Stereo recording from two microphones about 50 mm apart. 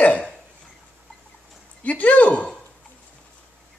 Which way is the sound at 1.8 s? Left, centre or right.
Left.